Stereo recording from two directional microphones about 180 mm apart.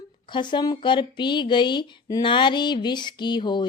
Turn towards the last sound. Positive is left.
turn(degrees=25)  # may be behind; listen again after turning